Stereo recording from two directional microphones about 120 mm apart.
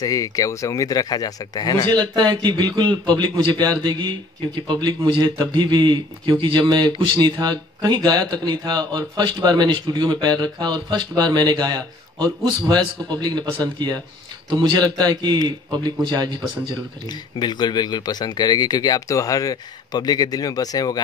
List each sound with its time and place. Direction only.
0.0 s speech: 30° left (ahead or behind)
2.0 s a man's voice: 35° right (ahead or behind)
17.4 s speech: 40° left (ahead or behind)